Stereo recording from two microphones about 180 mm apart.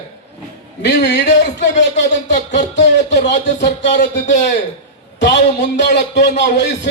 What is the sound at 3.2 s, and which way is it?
A man's voice, 70° left (ahead or behind).